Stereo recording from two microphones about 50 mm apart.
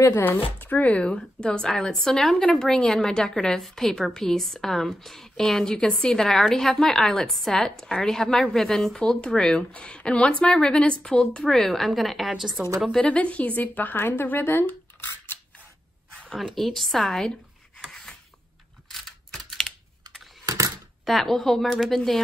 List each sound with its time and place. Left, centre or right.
0.2 s a woman's voice: left
1.1 s a woman's voice: centre
13.0 s a woman's voice: left
16.3 s a woman's voice: centre
17.8 s a sound: centre
18.9 s computer keyboard: centre
21.0 s a woman's voice: centre